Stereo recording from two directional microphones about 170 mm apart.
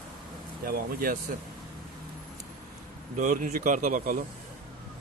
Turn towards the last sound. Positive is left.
turn(degrees=-50)  # may be behind; listen again after turning